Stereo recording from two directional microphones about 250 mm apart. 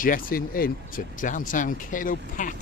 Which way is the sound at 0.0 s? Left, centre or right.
Left.